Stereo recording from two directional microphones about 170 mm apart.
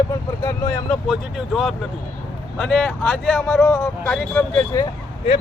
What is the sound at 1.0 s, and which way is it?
Speech, 5° right (ahead or behind).